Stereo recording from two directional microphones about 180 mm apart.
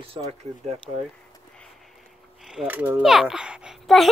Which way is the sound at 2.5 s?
10° right (ahead or behind).